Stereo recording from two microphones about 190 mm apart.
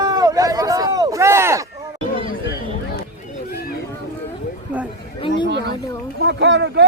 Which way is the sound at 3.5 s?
55° left (ahead or behind).